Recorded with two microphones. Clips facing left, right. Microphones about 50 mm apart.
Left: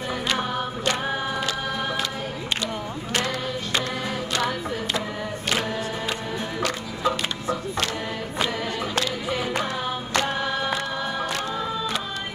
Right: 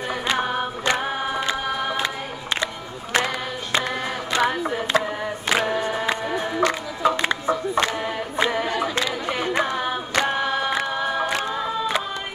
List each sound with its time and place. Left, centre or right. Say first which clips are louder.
0.3 s music: right 4 dB; right
4.3 s music: right 7 dB; right
9.8 s a capella: right 2 dB; centre